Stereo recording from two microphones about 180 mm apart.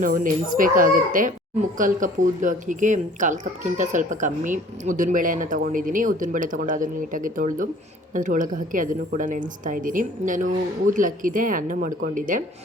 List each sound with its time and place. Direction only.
0.0 s speech: 45° right (ahead or behind)